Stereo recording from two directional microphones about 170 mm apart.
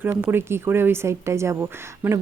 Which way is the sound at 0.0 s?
10° right (ahead or behind).